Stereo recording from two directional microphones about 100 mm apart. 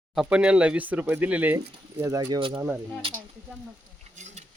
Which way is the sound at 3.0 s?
65° right (ahead or behind).